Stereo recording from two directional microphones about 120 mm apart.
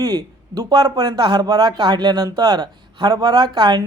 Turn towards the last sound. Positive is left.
turn(degrees=-40)  # may be behind; listen again after turning